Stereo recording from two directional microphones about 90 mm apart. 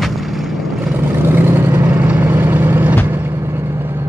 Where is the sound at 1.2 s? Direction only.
25° right (ahead or behind).